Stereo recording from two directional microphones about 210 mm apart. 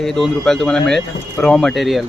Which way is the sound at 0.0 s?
Centre (ahead or behind).